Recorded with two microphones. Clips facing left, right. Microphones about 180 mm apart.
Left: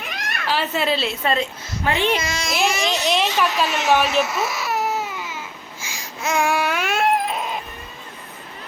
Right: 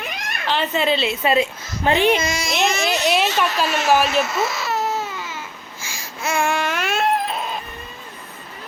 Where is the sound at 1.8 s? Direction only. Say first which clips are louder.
Right 4 dB; 20° right (ahead or behind).